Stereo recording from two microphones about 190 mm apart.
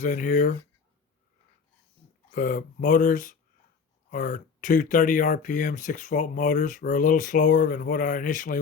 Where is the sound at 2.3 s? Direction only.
45° left (ahead or behind).